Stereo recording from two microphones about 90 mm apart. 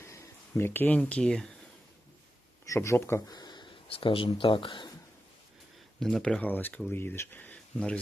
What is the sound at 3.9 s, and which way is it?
Speech, 80° left.